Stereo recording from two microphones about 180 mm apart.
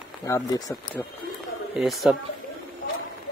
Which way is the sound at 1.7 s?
Centre (ahead or behind).